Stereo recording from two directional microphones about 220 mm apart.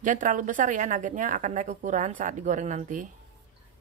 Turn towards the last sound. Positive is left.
turn(degrees=-35)  # may be behind; listen again after turning